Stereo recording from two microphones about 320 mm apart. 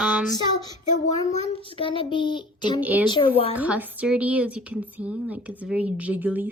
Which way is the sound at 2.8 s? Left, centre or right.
Centre.